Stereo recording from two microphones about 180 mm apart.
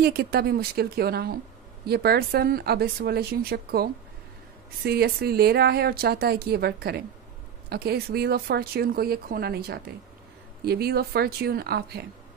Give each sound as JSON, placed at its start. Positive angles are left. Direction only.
{"t": 0.0, "sound": "speech", "side_deg": -60}